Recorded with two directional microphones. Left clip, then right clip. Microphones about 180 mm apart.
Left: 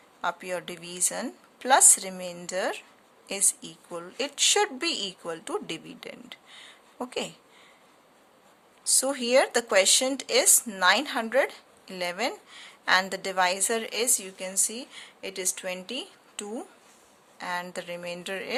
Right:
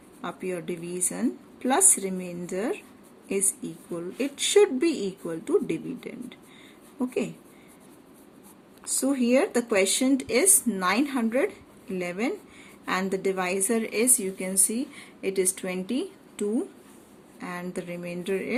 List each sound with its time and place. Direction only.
0.2 s a woman's voice: 40° left (ahead or behind)
9.0 s a woman's voice: 45° left (ahead or behind)